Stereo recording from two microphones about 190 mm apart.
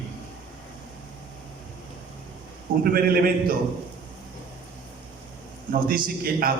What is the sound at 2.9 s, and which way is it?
Speech, 50° right (ahead or behind).